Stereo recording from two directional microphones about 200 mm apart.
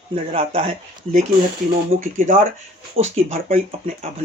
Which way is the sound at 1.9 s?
40° right (ahead or behind).